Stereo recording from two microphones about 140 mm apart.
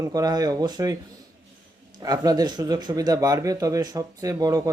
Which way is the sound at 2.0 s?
25° right (ahead or behind).